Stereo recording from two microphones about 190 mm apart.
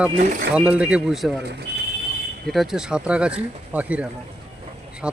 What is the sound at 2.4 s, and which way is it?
Speech, centre (ahead or behind).